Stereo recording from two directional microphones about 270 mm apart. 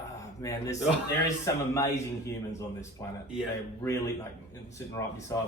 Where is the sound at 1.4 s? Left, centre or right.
Centre.